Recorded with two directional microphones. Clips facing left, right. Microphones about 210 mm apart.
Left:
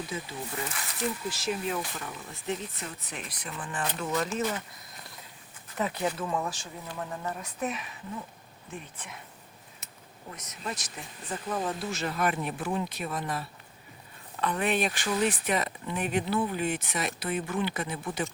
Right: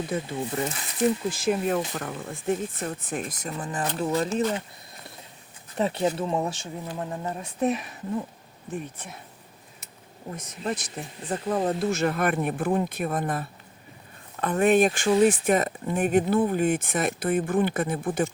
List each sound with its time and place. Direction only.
0.1 s speech: 55° right (ahead or behind)
0.7 s speech: 25° right (ahead or behind)
1.3 s speech: 50° right (ahead or behind); by 4.6 s 35° right (ahead or behind)
5.7 s speech: 30° right (ahead or behind)
10.3 s speech: 30° right (ahead or behind); by 18.3 s 50° right (ahead or behind)